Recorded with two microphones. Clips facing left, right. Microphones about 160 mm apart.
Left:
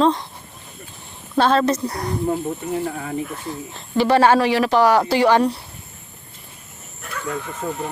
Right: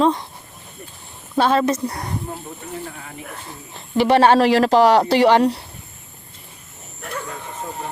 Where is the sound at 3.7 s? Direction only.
20° right (ahead or behind).